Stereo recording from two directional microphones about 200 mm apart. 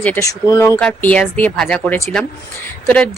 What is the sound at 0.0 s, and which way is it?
Speech, 10° left (ahead or behind).